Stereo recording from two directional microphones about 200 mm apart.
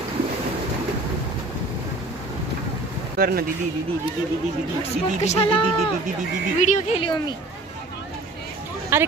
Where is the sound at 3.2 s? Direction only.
50° right (ahead or behind).